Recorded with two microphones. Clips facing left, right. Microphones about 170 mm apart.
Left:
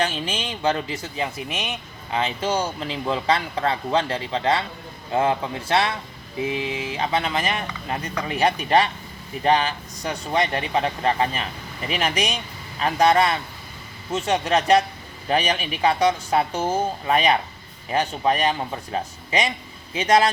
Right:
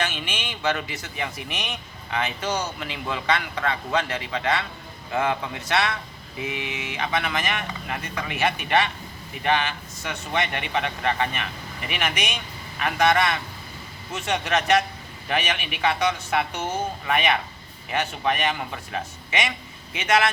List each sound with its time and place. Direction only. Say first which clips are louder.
0.0 s speech: left 4 dB; 30° left (ahead or behind)